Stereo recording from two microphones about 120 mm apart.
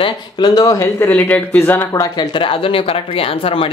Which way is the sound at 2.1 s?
45° left (ahead or behind).